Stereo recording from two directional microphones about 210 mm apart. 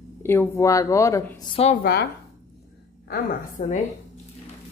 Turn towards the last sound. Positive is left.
turn(degrees=35)  # may be behind; listen again after turning